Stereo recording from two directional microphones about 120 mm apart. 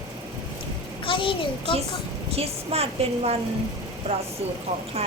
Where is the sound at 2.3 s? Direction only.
55° right (ahead or behind).